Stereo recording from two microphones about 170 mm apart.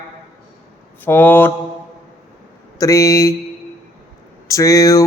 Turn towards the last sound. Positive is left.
turn(degrees=20)  # may be behind; listen again after turning